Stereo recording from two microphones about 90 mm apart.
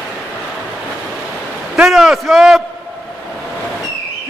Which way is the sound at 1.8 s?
Centre (ahead or behind).